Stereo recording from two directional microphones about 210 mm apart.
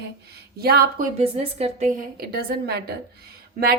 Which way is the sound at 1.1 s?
30° right (ahead or behind).